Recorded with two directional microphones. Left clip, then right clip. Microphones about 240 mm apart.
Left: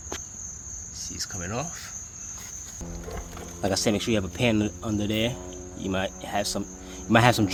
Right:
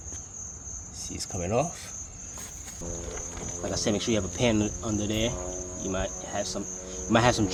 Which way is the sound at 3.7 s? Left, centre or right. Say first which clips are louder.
Left 2 dB; left.